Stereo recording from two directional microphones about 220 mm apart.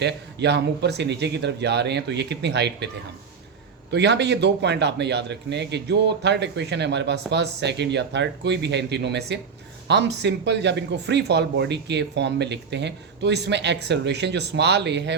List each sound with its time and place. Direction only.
0.0 s a man's voice: 50° right (ahead or behind)
3.9 s a man's voice: 50° right (ahead or behind)